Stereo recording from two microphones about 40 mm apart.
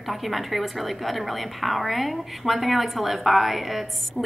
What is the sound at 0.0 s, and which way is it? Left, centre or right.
A woman's voice, centre.